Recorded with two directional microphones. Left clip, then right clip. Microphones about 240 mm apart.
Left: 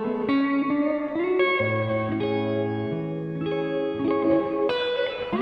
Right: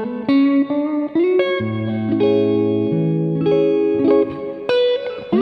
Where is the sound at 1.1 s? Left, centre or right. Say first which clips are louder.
Right 7 dB; right.